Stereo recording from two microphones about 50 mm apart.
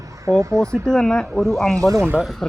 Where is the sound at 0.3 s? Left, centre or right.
Right.